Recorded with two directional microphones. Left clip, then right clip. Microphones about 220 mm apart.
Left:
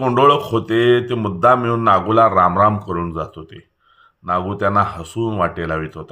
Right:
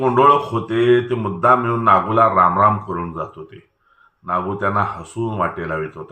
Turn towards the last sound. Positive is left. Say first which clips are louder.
# left 1 dB
turn(degrees=50)  # may be behind; listen again after turning